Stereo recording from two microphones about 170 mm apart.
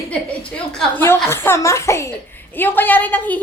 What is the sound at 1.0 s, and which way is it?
A child's voice, 15° left (ahead or behind).